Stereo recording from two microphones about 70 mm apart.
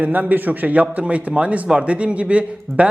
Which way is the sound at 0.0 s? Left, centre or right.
Right.